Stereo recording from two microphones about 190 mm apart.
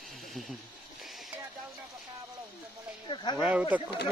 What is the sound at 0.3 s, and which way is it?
Speech, centre (ahead or behind).